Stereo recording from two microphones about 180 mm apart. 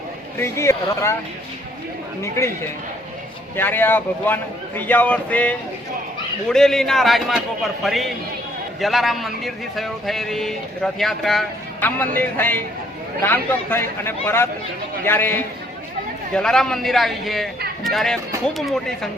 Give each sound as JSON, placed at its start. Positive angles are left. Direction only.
{"t": 0.3, "sound": "speech", "side_deg": 15}
{"t": 2.2, "sound": "speech", "side_deg": 15}
{"t": 3.5, "sound": "a man's voice", "side_deg": 10}